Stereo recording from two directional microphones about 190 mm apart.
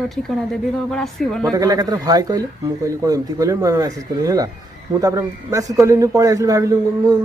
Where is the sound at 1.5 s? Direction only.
20° right (ahead or behind).